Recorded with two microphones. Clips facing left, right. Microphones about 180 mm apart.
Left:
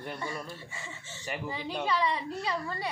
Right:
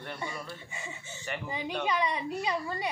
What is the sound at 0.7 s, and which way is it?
A woman's voice, 15° right (ahead or behind).